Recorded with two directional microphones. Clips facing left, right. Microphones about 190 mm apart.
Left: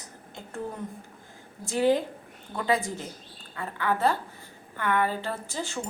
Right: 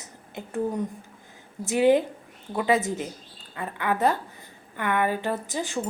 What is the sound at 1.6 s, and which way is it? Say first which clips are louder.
A woman's voice: right 4 dB; 20° right (ahead or behind).